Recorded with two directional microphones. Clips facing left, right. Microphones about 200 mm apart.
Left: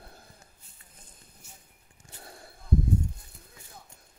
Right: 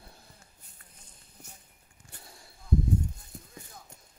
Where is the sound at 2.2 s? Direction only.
60° left (ahead or behind).